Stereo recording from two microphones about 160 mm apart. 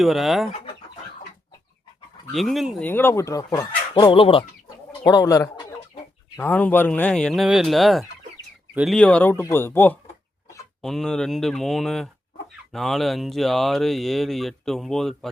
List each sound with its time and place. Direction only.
0.0 s speech: centre (ahead or behind)
2.3 s speech: centre (ahead or behind)
2.8 s speech: 15° left (ahead or behind); by 4.4 s 35° left (ahead or behind)
5.0 s speech: 20° left (ahead or behind)
6.3 s speech: 10° left (ahead or behind)
9.0 s speech: 10° left (ahead or behind)